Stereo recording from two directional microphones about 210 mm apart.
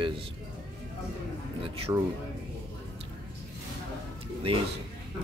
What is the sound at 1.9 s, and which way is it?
Speech, 15° right (ahead or behind).